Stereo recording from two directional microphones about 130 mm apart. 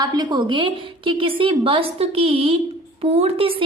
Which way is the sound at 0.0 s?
35° right (ahead or behind).